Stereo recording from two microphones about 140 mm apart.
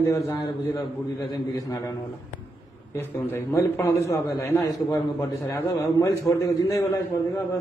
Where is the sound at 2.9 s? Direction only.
20° left (ahead or behind).